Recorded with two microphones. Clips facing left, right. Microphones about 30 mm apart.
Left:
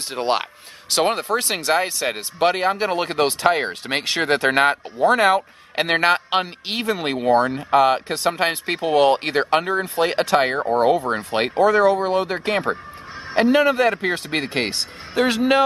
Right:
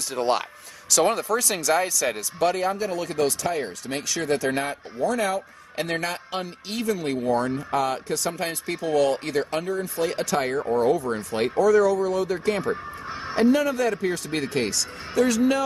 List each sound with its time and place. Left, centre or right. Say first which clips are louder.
0.1 s a man's voice: left 2 dB; left